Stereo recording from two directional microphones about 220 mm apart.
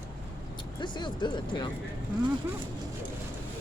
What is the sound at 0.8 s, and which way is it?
Speech, 20° left (ahead or behind).